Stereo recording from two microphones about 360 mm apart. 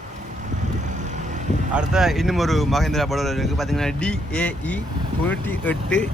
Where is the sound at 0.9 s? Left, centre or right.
Centre.